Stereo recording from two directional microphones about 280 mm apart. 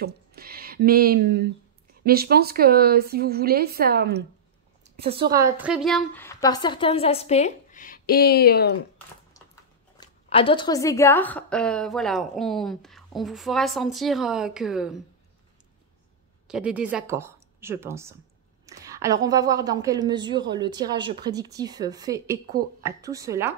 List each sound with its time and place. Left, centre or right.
0.0 s speech: right
4.8 s a woman's voice: right; by 8.7 s left
9.9 s a woman's voice: centre
16.4 s a woman's voice: centre